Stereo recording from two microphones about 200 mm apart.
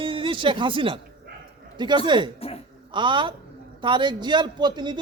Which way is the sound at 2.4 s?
30° left (ahead or behind).